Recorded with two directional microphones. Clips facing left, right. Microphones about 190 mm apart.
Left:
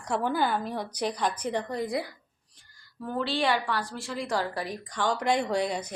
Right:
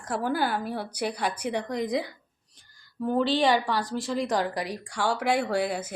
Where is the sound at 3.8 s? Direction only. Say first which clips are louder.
Right 6 dB; 40° right (ahead or behind).